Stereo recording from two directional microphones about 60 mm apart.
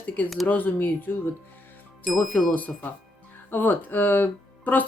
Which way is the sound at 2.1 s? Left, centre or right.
Centre.